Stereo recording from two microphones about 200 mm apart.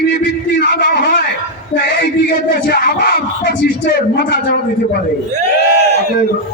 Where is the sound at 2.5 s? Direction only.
50° left (ahead or behind).